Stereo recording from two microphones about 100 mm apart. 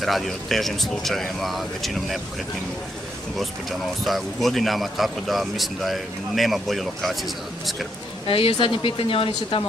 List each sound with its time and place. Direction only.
0.0 s a man's voice: centre (ahead or behind)
4.0 s a man's voice: centre (ahead or behind)
8.3 s speech: 65° left (ahead or behind)